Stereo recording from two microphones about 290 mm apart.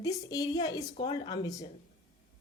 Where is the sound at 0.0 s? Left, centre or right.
Centre.